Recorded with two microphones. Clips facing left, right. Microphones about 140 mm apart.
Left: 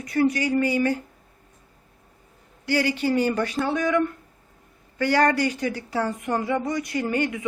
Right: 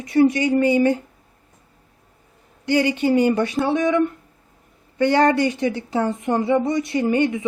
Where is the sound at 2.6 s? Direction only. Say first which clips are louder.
Right 4 dB; 20° right (ahead or behind).